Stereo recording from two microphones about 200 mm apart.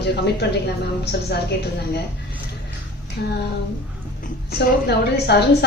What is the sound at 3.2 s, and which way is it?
A woman's voice, 50° left (ahead or behind).